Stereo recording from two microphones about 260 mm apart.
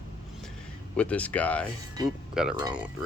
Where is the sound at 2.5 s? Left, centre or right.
Centre.